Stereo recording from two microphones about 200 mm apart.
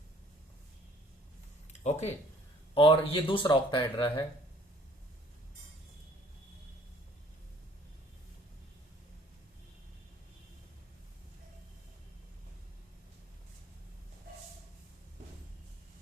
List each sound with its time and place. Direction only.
1.8 s speech: 35° left (ahead or behind)